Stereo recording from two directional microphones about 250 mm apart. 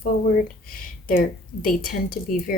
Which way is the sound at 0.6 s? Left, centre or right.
Left.